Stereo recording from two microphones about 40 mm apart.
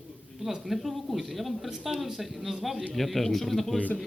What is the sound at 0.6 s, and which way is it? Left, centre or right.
Speech, centre.